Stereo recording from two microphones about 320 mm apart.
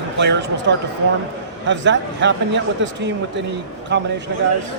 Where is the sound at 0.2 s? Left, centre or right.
Right.